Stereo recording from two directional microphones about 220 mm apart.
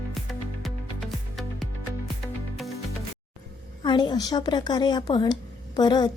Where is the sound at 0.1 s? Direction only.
Centre (ahead or behind).